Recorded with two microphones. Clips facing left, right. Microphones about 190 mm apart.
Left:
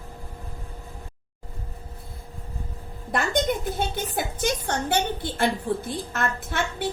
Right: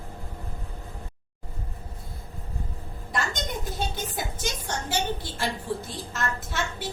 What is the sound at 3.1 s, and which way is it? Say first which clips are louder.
A woman's voice: left 7 dB; 60° left (ahead or behind).